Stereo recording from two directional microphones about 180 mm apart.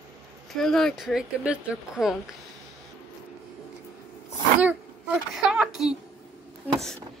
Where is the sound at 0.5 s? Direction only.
Centre (ahead or behind).